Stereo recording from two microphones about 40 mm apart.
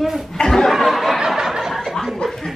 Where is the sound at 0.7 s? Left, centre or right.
Centre.